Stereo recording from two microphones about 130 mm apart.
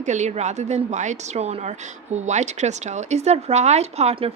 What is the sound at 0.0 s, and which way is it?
Speech, 65° right (ahead or behind).